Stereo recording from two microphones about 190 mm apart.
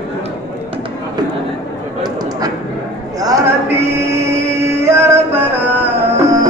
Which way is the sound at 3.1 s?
20° right (ahead or behind).